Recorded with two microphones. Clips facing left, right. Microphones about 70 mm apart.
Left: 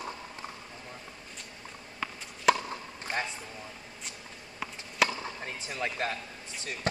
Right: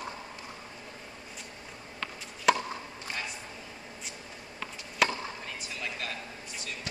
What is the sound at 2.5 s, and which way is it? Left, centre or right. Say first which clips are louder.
Chop: left 1 dB; centre.